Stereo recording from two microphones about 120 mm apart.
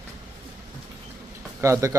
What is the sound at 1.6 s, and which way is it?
Speech, 25° right (ahead or behind).